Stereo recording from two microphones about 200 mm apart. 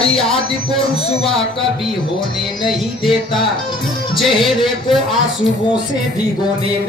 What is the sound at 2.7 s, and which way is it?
Music, centre (ahead or behind).